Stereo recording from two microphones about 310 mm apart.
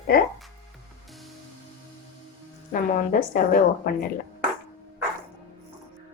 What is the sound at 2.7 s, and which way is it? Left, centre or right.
Speech, left.